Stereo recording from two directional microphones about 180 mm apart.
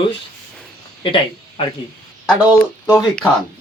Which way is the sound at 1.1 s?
30° left (ahead or behind).